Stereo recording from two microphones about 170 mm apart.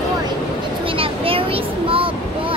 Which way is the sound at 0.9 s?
35° right (ahead or behind).